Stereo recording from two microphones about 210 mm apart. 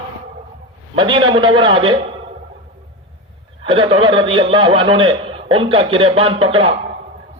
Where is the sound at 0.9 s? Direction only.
20° right (ahead or behind).